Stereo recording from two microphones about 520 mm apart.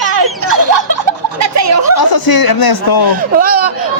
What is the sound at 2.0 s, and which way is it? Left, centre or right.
Speech, left.